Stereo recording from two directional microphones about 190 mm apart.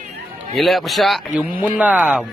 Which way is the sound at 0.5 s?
Centre (ahead or behind).